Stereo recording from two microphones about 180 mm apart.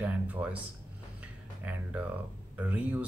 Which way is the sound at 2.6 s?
10° right (ahead or behind).